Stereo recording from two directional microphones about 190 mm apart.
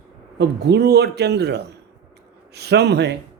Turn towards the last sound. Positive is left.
turn(degrees=-60)  # may be behind; listen again after turning